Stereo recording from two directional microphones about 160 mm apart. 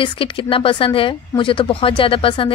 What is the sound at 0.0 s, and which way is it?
Speech, 35° left (ahead or behind).